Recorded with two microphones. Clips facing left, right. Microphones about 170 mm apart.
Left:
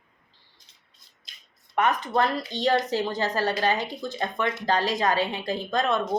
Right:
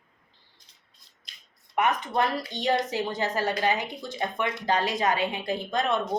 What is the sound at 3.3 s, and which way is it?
A woman's voice, 15° right (ahead or behind).